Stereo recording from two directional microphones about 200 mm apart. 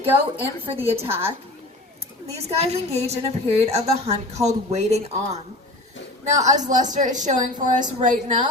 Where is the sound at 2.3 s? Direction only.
30° right (ahead or behind).